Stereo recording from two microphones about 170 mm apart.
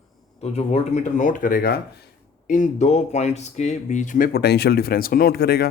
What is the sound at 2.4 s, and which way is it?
Speech, 50° left (ahead or behind).